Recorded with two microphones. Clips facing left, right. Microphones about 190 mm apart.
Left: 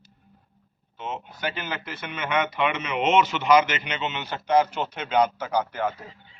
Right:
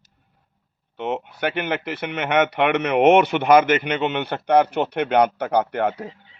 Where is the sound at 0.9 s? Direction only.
65° right (ahead or behind).